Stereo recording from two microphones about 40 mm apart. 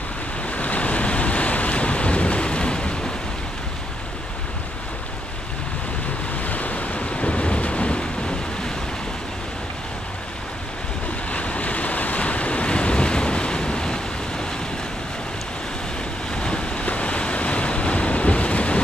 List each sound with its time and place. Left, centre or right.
0.5 s waves: left
6.4 s waves: left
11.3 s waves: left
16.3 s waves: left